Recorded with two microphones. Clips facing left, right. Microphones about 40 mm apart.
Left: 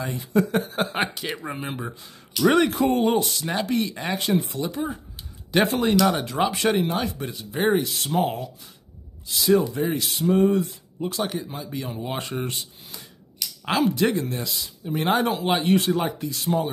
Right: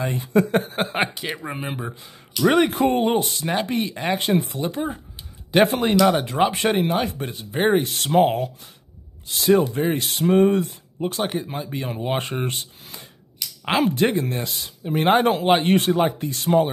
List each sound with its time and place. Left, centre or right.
0.0 s speech: right
0.9 s speech: centre
2.7 s speech: right; by 4.2 s centre
4.4 s speech: right
11.0 s speech: right